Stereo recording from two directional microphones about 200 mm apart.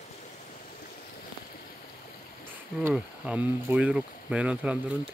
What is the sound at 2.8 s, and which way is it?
Speech, 5° right (ahead or behind).